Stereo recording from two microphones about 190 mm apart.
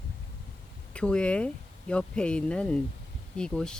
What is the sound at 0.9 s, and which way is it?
Speech, 5° left (ahead or behind).